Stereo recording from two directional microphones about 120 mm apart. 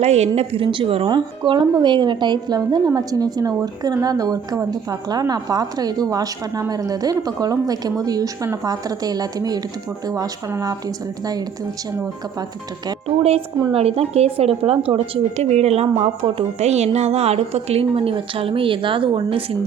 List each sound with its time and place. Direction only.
0.0 s a woman's voice: 65° right (ahead or behind)
0.3 s speech: 50° right (ahead or behind)
1.1 s a woman's voice: 35° right (ahead or behind)
13.1 s speech: 55° right (ahead or behind)